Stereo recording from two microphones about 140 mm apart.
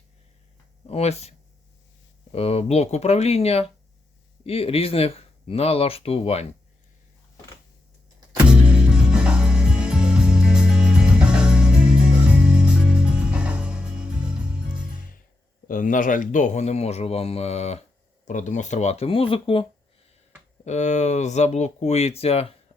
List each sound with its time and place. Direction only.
0.9 s speech: 50° left (ahead or behind)
2.3 s speech: 45° left (ahead or behind)
8.4 s music: 5° right (ahead or behind)
15.6 s speech: 75° left (ahead or behind); by 17.8 s 50° left (ahead or behind)
18.3 s speech: 60° left (ahead or behind); by 19.6 s 40° left (ahead or behind)
20.7 s speech: 55° left (ahead or behind)